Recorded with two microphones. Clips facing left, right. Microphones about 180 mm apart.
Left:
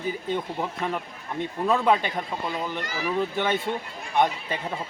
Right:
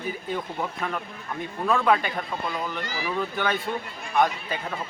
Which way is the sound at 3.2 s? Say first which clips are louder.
Left 2 dB; 25° left (ahead or behind).